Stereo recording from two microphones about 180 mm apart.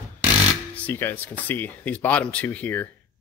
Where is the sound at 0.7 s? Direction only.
10° left (ahead or behind).